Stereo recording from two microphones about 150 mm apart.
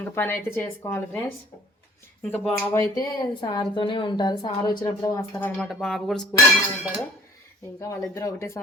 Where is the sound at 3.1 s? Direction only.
25° left (ahead or behind).